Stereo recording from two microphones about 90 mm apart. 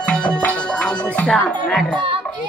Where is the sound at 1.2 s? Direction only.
10° left (ahead or behind).